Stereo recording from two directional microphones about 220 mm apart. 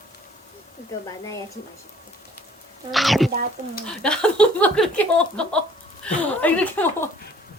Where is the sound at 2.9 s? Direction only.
Centre (ahead or behind).